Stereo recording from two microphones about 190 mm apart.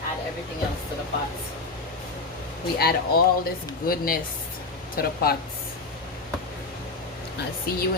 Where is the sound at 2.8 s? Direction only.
55° left (ahead or behind).